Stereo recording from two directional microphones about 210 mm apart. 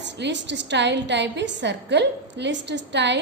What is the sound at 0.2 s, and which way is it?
A woman's voice, 55° right (ahead or behind).